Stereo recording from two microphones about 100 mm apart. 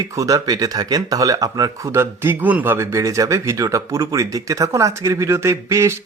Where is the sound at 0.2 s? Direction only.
40° right (ahead or behind); by 2.7 s 15° right (ahead or behind).